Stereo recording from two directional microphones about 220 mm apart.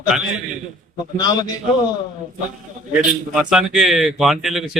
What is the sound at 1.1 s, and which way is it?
Speech, 20° left (ahead or behind).